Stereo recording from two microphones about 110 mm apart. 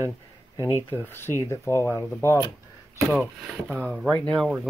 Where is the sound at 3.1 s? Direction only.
15° right (ahead or behind).